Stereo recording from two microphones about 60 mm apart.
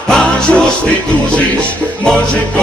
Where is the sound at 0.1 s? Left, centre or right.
Centre.